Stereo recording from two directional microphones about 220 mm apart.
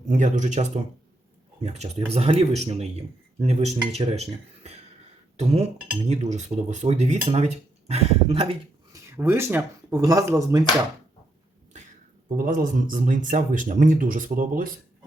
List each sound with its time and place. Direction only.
0.0 s speech: 30° right (ahead or behind)
8.9 s speech: 10° right (ahead or behind)
12.4 s speech: 35° right (ahead or behind)